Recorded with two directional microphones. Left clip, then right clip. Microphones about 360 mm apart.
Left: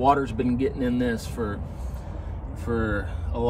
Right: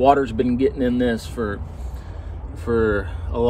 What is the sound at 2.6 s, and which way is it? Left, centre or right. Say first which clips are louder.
Speech: right 8 dB; centre.